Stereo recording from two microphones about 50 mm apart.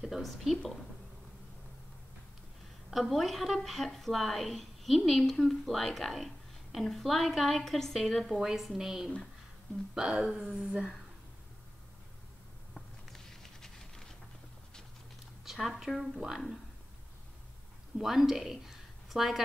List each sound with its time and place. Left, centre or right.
0.0 s a woman's voice: centre
2.9 s a woman's voice: centre
12.7 s patter: centre
15.4 s speech: centre
17.9 s speech: centre